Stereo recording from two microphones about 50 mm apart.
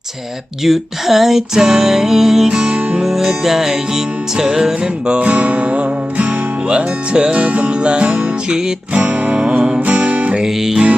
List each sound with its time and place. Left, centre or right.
0.6 s music: centre
2.5 s music: centre
3.0 s music: centre; by 10.4 s right
10.4 s music: centre